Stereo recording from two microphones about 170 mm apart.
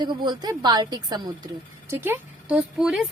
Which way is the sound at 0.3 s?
25° right (ahead or behind).